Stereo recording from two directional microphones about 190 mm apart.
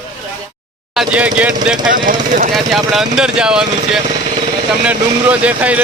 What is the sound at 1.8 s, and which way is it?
Speech, 45° right (ahead or behind).